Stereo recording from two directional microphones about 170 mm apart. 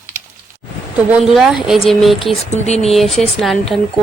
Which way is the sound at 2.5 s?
40° left (ahead or behind).